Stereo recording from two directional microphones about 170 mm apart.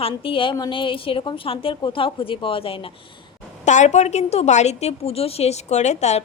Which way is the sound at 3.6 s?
45° left (ahead or behind).